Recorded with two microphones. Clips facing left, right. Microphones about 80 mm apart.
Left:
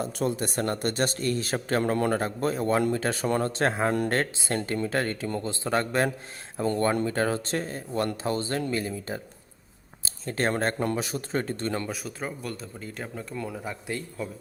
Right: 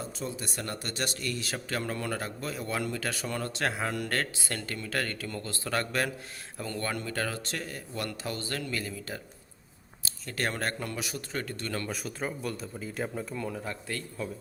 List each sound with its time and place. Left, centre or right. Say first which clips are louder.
0.0 s speech: left 9 dB; left
11.9 s speech: left 1 dB; centre
13.5 s speech: left 2 dB; centre
14.2 s speech: left 1 dB; centre